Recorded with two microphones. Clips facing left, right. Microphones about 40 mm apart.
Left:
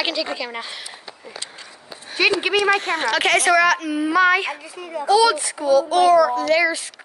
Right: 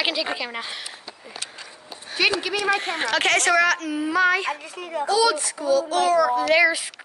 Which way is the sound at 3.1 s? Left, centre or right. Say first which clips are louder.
Left 2 dB; centre.